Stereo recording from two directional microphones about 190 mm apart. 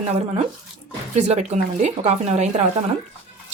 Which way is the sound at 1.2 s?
35° right (ahead or behind).